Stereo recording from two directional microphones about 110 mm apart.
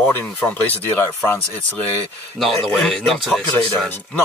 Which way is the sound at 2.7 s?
5° left (ahead or behind).